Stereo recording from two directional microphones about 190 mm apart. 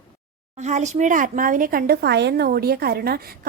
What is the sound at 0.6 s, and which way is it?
Speech, 40° right (ahead or behind).